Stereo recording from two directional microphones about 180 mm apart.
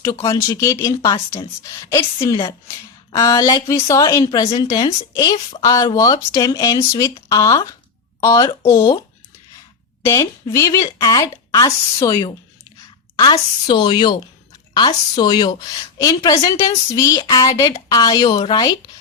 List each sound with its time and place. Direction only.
0.0 s speech: 20° left (ahead or behind)
10.0 s speech: 15° left (ahead or behind)